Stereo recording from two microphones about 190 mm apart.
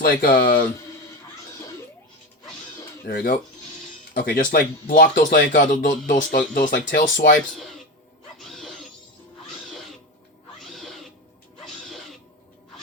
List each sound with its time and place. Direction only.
0.0 s speech: 50° left (ahead or behind)
3.1 s speech: 50° left (ahead or behind)
8.4 s music: centre (ahead or behind)
10.6 s cat: centre (ahead or behind)